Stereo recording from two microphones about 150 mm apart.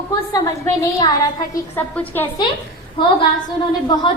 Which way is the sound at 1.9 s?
10° left (ahead or behind).